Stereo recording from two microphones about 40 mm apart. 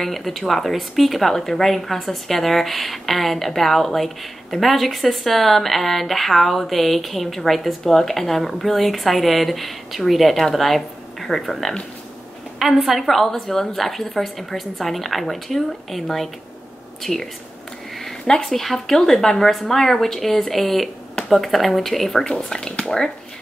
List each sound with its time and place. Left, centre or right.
0.0 s speech: centre
12.8 s speech: centre
18.2 s speech: centre